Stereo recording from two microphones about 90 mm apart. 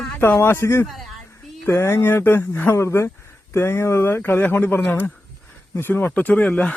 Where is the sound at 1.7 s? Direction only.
30° left (ahead or behind).